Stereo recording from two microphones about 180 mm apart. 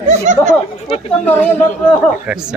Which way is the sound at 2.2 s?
5° right (ahead or behind).